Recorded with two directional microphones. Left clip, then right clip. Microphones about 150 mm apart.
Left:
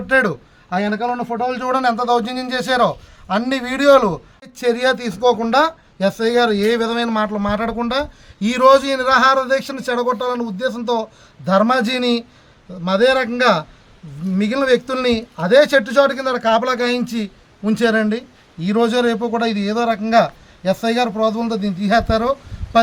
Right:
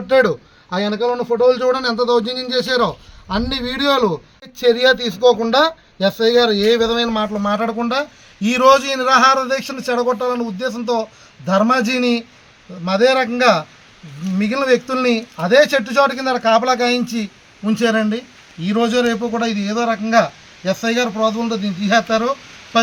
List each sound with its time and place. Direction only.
0.1 s a man's voice: 20° left (ahead or behind)
2.0 s a man's voice: 70° left (ahead or behind)
3.8 s speech: 25° left (ahead or behind)
7.3 s a man's voice: 40° left (ahead or behind)